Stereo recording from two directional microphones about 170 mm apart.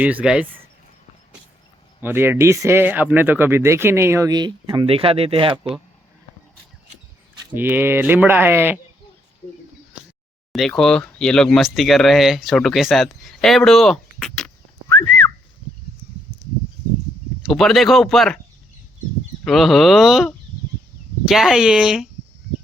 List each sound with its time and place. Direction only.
0.0 s speech: 10° right (ahead or behind)
2.0 s speech: 10° right (ahead or behind); by 5.7 s 30° right (ahead or behind)
7.5 s speech: 10° right (ahead or behind)
10.5 s speech: centre (ahead or behind)
17.4 s speech: centre (ahead or behind)
19.5 s speech: centre (ahead or behind)